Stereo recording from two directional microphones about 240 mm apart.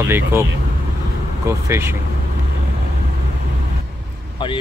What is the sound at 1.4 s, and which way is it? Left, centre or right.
Speech, centre.